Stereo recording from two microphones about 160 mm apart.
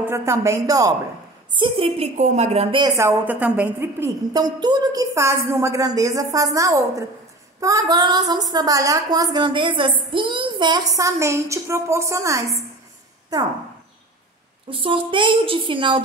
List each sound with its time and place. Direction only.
0.0 s a woman's voice: 15° right (ahead or behind)
1.6 s a woman's voice: 35° right (ahead or behind)
3.0 s a woman's voice: 15° right (ahead or behind)
14.7 s a woman's voice: 35° right (ahead or behind)